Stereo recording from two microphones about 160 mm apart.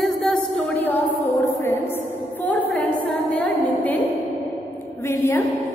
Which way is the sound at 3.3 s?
10° left (ahead or behind).